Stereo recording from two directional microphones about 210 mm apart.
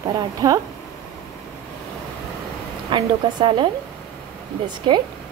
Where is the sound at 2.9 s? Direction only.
25° right (ahead or behind).